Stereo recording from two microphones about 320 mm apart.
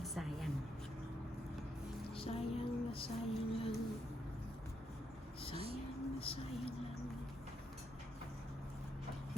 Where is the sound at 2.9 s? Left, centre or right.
Centre.